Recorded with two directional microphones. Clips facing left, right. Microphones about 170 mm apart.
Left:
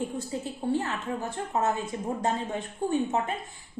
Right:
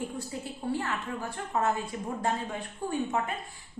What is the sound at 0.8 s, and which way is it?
Speech, 20° left (ahead or behind).